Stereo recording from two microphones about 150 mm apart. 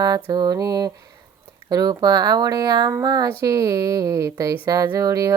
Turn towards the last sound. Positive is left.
turn(degrees=-25)  # may be behind; listen again after turning